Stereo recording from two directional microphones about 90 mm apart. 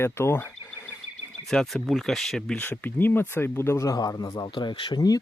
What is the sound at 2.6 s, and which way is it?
Speech, 20° left (ahead or behind).